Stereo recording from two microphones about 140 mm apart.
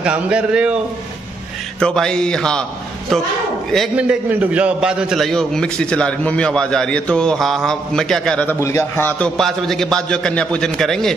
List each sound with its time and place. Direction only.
0.0 s a man's voice: 10° right (ahead or behind)
1.8 s a man's voice: 5° left (ahead or behind)
3.9 s a man's voice: 10° right (ahead or behind); by 8.5 s 5° left (ahead or behind)
8.5 s a man's voice: 20° left (ahead or behind)
9.4 s a man's voice: 5° left (ahead or behind)